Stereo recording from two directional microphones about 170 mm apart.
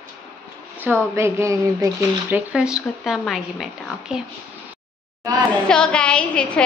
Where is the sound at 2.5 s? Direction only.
5° right (ahead or behind).